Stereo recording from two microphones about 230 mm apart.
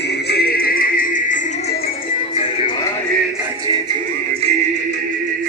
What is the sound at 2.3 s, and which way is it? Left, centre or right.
Music, left.